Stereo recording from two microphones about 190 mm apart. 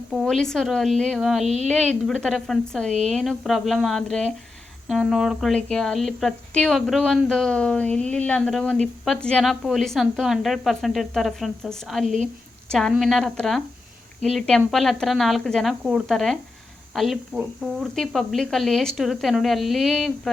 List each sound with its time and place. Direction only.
0.1 s speech: centre (ahead or behind)
1.5 s a woman's voice: 35° right (ahead or behind)
2.0 s speech: centre (ahead or behind)
12.0 s a woman's voice: 40° right (ahead or behind)
12.6 s speech: 5° left (ahead or behind)